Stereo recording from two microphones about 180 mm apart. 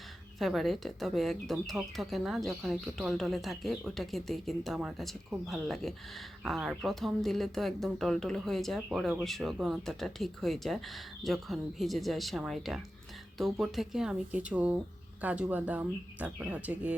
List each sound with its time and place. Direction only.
0.3 s speech: centre (ahead or behind)